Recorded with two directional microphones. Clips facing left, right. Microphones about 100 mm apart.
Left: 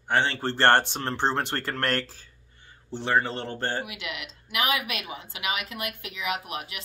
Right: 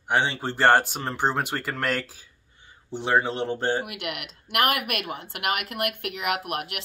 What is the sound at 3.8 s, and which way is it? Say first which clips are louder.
Speech: right 3 dB; 60° right (ahead or behind).